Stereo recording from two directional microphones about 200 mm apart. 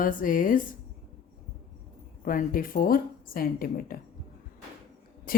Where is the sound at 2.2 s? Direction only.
45° left (ahead or behind).